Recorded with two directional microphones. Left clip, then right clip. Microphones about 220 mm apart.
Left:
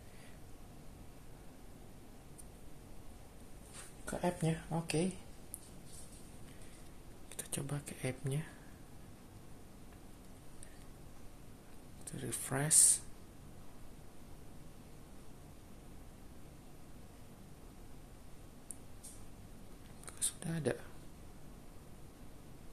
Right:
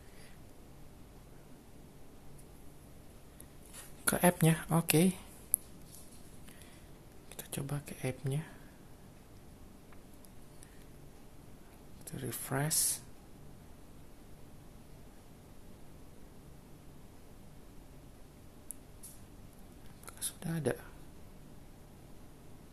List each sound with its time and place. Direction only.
4.0 s speech: 40° right (ahead or behind)
7.3 s speech: 10° right (ahead or behind)
12.1 s speech: 10° right (ahead or behind)
20.1 s a sound: 10° right (ahead or behind)